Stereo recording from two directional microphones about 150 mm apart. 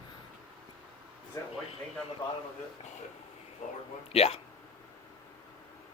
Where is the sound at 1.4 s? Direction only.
20° left (ahead or behind).